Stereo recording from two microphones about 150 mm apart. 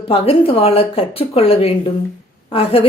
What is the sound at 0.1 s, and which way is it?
A woman's voice, 40° left (ahead or behind).